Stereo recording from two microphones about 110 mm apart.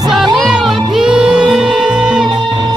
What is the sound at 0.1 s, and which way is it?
Music, 5° right (ahead or behind).